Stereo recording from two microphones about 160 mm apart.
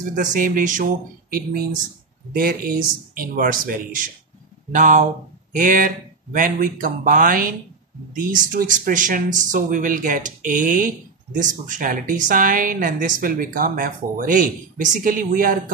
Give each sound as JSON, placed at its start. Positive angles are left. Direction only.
{"t": 0.1, "sound": "a woman's voice", "side_deg": -55}